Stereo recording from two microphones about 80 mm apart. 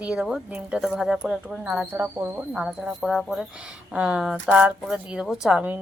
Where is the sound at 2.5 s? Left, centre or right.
Centre.